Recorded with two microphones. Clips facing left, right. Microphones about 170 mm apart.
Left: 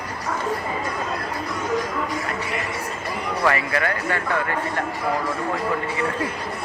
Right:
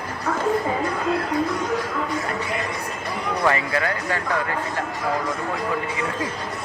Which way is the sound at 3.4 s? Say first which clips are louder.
Even; 20° right (ahead or behind).